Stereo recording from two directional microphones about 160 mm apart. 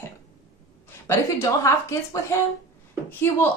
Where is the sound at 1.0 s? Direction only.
20° left (ahead or behind).